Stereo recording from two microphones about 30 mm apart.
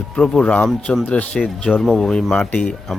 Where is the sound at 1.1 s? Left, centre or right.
Left.